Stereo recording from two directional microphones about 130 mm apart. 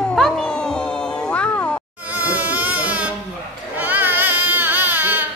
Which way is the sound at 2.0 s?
10° right (ahead or behind).